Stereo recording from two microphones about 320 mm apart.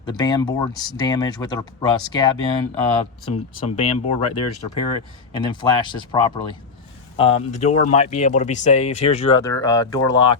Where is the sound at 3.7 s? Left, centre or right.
Centre.